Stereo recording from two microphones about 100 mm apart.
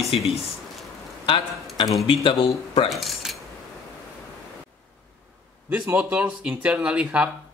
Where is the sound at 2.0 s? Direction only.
65° left (ahead or behind).